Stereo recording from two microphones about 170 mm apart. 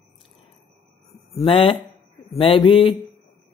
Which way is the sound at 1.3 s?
35° left (ahead or behind).